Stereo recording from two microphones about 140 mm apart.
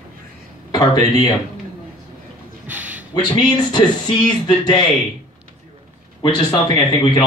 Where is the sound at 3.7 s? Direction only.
30° left (ahead or behind).